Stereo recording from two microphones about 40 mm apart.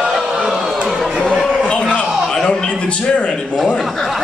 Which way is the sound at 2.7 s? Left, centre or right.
Left.